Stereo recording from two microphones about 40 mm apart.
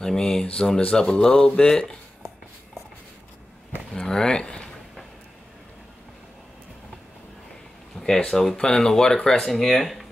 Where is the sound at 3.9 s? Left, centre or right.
Centre.